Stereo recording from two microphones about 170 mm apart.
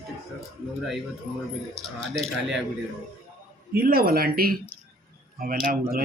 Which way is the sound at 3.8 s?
60° right (ahead or behind).